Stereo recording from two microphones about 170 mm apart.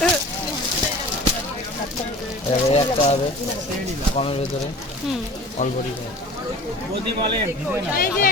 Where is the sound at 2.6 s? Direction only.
40° left (ahead or behind).